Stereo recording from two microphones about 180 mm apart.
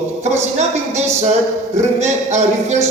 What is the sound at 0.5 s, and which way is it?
Speech, 40° right (ahead or behind).